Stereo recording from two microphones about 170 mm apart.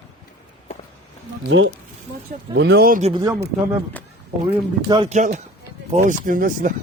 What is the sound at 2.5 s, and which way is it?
Speech, 90° right.